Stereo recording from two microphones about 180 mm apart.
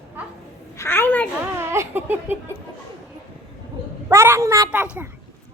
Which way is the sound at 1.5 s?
15° right (ahead or behind).